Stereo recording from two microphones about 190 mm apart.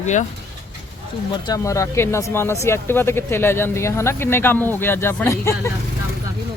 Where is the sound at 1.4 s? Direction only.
15° left (ahead or behind).